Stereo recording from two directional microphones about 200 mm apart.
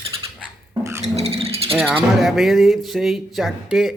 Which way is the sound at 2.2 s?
Centre (ahead or behind).